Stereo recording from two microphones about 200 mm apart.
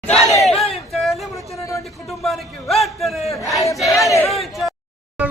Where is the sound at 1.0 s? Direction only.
Centre (ahead or behind).